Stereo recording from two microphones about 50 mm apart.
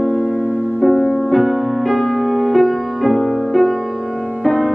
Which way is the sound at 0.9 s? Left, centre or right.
Centre.